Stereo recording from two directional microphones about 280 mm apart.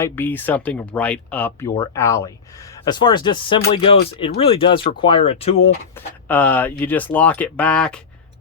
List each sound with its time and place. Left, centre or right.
0.0 s speech: centre
6.2 s speech: centre